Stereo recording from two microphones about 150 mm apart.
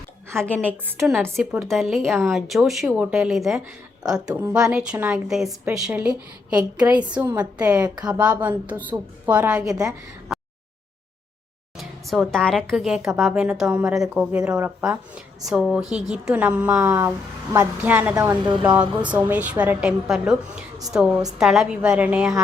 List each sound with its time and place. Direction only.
0.3 s a woman's voice: 10° left (ahead or behind); by 7.2 s 10° right (ahead or behind)
7.2 s a woman's voice: 20° right (ahead or behind)
8.0 s a woman's voice: 10° right (ahead or behind)
10.3 s a sound: centre (ahead or behind)
11.8 s a woman's voice: centre (ahead or behind)
18.2 s a woman's voice: 25° right (ahead or behind)
18.6 s a woman's voice: 10° right (ahead or behind)